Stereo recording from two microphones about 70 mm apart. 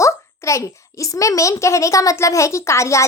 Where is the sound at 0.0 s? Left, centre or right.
Left.